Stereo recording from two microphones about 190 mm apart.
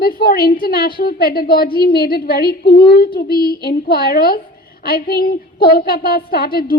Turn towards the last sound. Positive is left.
turn(degrees=55)  # may be behind; listen again after turning